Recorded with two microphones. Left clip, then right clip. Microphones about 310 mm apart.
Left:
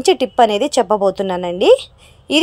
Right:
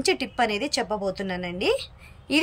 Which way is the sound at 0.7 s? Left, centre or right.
Left.